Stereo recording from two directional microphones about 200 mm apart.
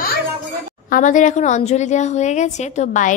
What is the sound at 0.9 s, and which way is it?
A woman's voice, 40° left (ahead or behind).